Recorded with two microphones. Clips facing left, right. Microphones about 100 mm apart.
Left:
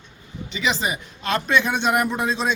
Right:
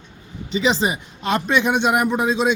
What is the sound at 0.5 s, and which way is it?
A man's voice, 30° right (ahead or behind).